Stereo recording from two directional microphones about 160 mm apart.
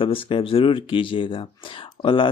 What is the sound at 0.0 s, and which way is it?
Speech, 35° left (ahead or behind).